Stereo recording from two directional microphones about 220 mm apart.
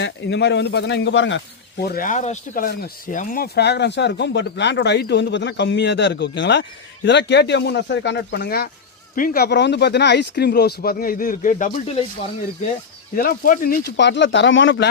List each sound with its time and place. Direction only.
0.0 s speech: 50° left (ahead or behind)
1.8 s speech: 45° left (ahead or behind)
13.1 s speech: 40° left (ahead or behind)